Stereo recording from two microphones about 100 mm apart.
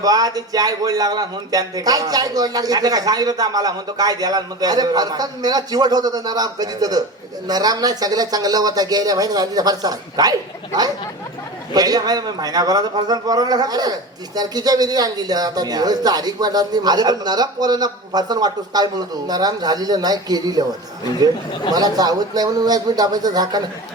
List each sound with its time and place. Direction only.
0.0 s a man's voice: 40° right (ahead or behind)
11.7 s a man's voice: 40° right (ahead or behind)
21.7 s a man's voice: 40° right (ahead or behind)